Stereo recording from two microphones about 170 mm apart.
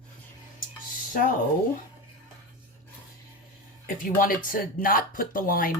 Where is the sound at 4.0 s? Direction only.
55° left (ahead or behind).